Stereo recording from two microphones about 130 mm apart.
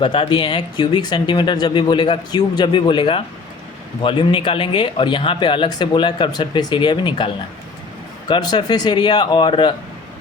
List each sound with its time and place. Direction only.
0.0 s speech: 40° left (ahead or behind)
8.3 s speech: 35° left (ahead or behind)